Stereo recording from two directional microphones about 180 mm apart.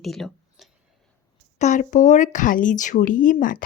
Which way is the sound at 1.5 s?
40° left (ahead or behind).